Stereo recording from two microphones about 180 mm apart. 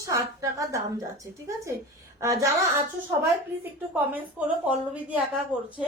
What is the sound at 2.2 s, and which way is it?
Speech, 15° right (ahead or behind).